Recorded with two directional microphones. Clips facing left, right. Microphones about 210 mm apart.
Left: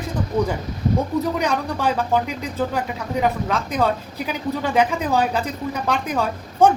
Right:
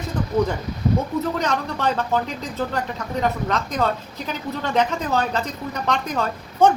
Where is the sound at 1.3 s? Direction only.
10° left (ahead or behind).